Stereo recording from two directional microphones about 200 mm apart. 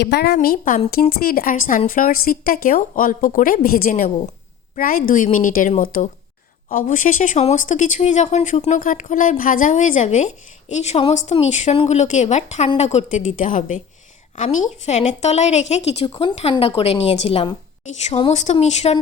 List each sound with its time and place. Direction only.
0.0 s a woman's voice: 55° left (ahead or behind); by 18.9 s 35° left (ahead or behind)